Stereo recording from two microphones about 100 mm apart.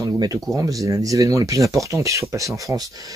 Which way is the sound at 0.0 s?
35° right (ahead or behind).